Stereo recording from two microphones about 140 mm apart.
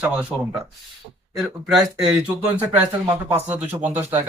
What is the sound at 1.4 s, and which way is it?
Speech, 5° right (ahead or behind).